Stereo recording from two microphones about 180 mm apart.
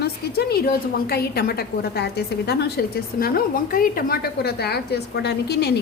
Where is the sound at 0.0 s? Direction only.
60° left (ahead or behind).